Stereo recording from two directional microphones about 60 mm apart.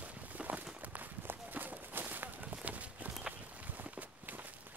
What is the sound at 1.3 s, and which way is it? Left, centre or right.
Walk, right.